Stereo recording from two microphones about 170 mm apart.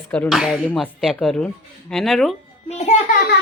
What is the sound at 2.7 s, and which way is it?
Speech, 40° left (ahead or behind).